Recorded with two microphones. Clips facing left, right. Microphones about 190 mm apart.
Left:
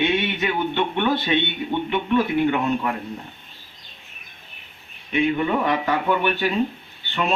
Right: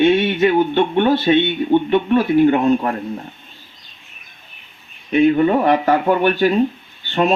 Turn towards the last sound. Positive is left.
turn(degrees=-35)  # may be behind; listen again after turning